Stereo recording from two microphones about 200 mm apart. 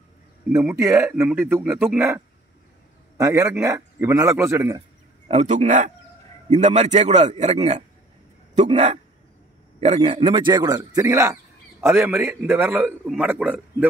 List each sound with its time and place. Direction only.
0.5 s speech: 15° right (ahead or behind)
5.3 s a man's voice: 35° right (ahead or behind); by 13.8 s 5° right (ahead or behind)